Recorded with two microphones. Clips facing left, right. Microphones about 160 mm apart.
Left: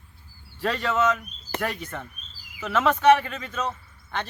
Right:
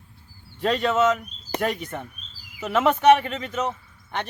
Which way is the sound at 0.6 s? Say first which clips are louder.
Right 3 dB; 20° right (ahead or behind).